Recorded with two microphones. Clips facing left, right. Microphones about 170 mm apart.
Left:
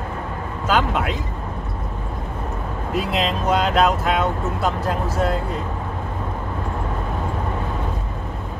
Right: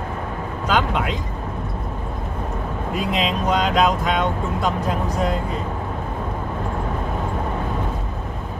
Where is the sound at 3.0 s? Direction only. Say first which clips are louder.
Left 1 dB; 5° left (ahead or behind).